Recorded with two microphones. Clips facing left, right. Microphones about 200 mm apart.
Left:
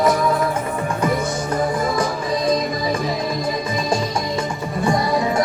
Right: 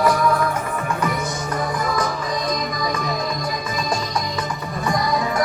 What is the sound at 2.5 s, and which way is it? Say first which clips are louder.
Music: left 4 dB; 30° left (ahead or behind).